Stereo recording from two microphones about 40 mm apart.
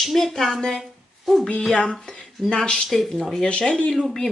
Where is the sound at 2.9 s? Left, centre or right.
Centre.